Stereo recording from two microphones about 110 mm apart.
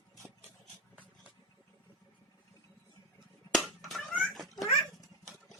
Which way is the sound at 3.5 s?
Centre (ahead or behind).